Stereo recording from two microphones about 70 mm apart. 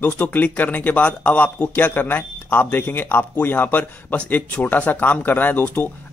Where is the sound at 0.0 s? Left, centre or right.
Left.